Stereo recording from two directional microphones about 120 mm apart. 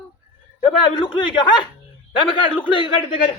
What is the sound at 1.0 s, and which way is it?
A man's voice, 40° left (ahead or behind).